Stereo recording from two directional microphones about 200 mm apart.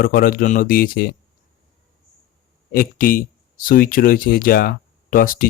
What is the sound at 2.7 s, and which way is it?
Speech, 45° left (ahead or behind).